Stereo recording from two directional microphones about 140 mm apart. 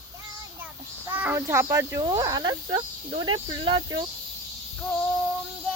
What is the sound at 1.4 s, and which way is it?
Speech, 20° right (ahead or behind).